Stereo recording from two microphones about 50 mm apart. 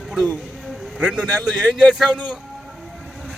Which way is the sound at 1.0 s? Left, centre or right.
Centre.